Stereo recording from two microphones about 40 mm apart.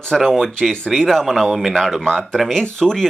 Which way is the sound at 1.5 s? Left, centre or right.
Centre.